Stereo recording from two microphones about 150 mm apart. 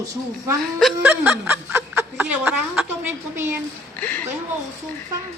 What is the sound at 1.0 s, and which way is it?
Speech, 10° right (ahead or behind).